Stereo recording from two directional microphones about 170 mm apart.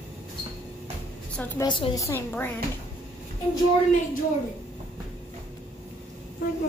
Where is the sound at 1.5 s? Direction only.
30° left (ahead or behind).